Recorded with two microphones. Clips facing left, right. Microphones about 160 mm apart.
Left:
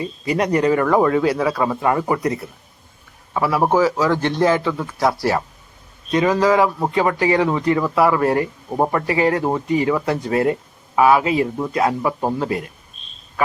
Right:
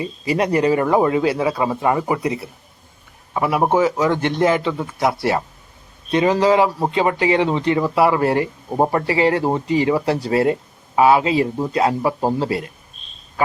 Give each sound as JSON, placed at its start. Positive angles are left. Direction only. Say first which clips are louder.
{"t": 0.0, "sound": "speech", "louder": "even", "side_deg": -30}
{"t": 2.0, "sound": "speech", "louder": "left 1 dB", "side_deg": -10}